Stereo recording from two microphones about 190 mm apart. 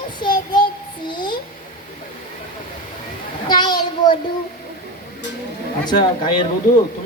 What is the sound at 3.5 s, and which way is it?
Speech, 20° left (ahead or behind).